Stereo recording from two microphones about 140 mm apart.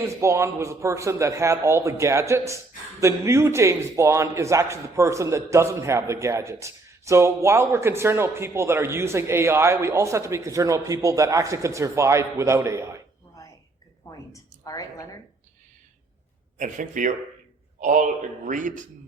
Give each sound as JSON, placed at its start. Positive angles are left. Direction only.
{"t": 0.2, "sound": "a man's voice", "side_deg": -20}
{"t": 14.0, "sound": "a sound", "side_deg": 25}
{"t": 16.6, "sound": "a man's voice", "side_deg": -65}